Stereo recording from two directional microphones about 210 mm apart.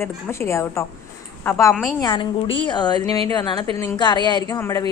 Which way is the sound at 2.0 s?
25° left (ahead or behind).